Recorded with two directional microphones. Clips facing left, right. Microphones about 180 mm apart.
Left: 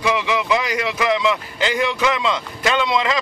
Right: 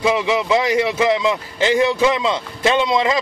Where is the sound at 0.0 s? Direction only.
25° right (ahead or behind).